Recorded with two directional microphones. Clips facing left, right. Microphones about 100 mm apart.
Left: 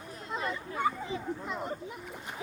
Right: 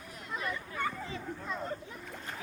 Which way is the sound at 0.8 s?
15° left (ahead or behind).